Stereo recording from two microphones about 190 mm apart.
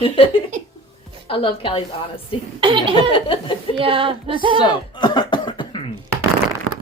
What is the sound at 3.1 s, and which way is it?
Speech, 25° left (ahead or behind).